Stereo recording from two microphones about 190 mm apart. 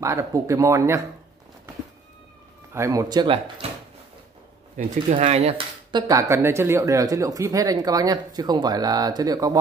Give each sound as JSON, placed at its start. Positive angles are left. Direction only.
{"t": 0.0, "sound": "speech", "side_deg": -15}
{"t": 2.7, "sound": "speech", "side_deg": -15}
{"t": 4.7, "sound": "speech", "side_deg": -40}